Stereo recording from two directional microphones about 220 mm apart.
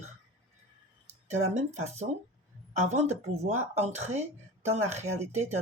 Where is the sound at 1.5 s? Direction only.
30° right (ahead or behind).